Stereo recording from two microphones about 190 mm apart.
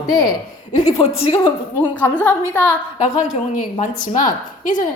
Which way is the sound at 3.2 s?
40° left (ahead or behind).